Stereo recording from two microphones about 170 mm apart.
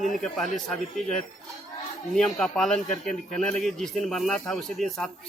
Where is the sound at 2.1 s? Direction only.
Centre (ahead or behind).